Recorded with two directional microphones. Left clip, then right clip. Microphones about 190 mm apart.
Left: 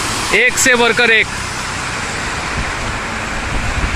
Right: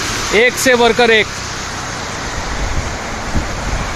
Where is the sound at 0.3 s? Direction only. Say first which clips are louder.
Right 1 dB; 10° right (ahead or behind).